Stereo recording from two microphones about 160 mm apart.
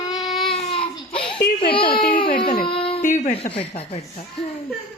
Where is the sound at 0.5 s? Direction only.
35° left (ahead or behind).